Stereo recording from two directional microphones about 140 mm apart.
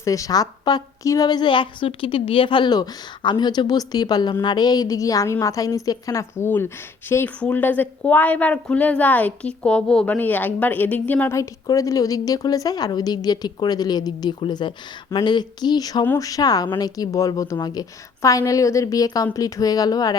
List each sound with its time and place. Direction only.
0.0 s a woman's voice: 25° left (ahead or behind)